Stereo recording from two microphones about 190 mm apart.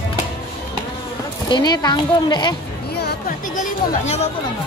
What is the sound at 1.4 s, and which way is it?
Speech, 20° left (ahead or behind).